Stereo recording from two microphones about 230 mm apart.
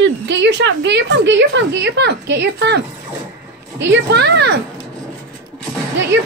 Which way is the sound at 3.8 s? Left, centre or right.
Right.